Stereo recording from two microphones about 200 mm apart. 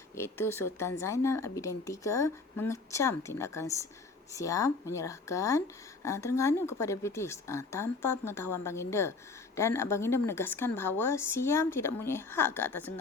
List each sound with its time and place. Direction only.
0.2 s speech: 15° left (ahead or behind)